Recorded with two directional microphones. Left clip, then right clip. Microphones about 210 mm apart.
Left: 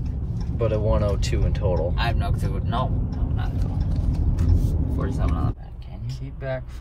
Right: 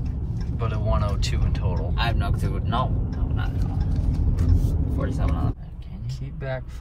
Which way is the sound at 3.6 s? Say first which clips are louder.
Even; 30° left (ahead or behind).